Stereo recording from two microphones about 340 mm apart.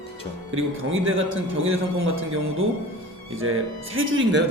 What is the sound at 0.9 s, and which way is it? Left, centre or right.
Speech, right.